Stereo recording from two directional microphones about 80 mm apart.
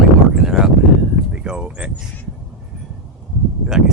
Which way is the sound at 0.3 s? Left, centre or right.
Centre.